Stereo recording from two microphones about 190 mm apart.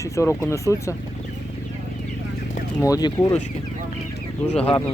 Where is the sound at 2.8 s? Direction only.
20° left (ahead or behind).